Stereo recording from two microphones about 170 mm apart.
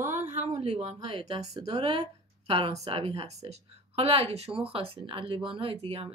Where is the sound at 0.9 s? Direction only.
20° right (ahead or behind).